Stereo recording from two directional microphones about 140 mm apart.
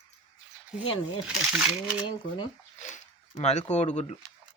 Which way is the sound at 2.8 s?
60° left (ahead or behind).